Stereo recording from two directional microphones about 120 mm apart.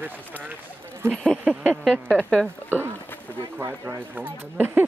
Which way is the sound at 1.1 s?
5° left (ahead or behind).